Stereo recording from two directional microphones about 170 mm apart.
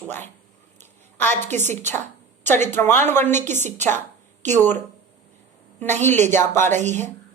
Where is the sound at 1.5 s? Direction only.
45° right (ahead or behind).